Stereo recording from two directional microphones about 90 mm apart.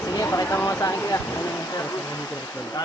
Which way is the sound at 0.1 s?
40° left (ahead or behind).